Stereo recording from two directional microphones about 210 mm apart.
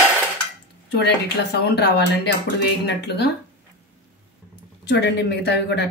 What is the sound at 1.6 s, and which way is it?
A woman's voice, 50° left (ahead or behind).